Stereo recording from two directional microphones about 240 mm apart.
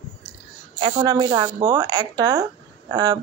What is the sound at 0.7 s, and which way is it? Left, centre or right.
Speech, right.